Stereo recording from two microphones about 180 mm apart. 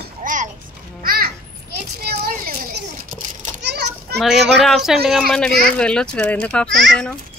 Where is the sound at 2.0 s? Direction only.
60° right (ahead or behind).